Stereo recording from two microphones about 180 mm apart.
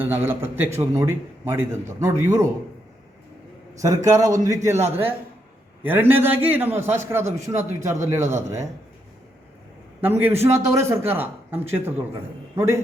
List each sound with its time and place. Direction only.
0.3 s a man's voice: 10° right (ahead or behind)
3.8 s a man's voice: 20° right (ahead or behind)
10.0 s a man's voice: 10° right (ahead or behind)